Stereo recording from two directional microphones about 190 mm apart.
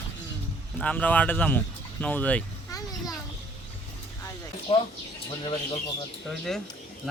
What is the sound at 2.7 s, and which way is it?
Children playing, 20° left (ahead or behind).